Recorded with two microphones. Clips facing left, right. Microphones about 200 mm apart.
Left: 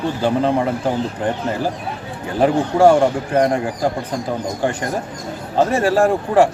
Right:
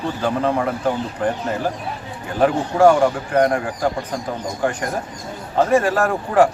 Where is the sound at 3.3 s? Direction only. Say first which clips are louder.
Left 1 dB; 25° left (ahead or behind).